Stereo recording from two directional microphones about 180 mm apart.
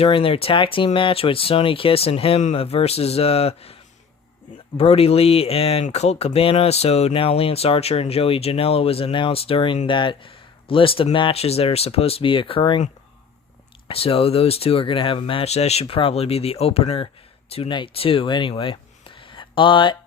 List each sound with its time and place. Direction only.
0.0 s speech: 30° left (ahead or behind)
4.8 s speech: 35° left (ahead or behind)
13.8 s speech: 30° left (ahead or behind)